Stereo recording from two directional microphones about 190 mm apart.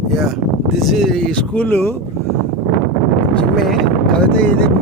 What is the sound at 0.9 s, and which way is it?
A man's voice, centre (ahead or behind).